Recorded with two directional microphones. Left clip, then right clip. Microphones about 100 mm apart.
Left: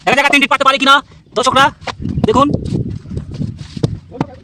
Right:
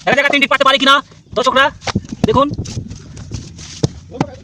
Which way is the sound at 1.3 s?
30° left (ahead or behind).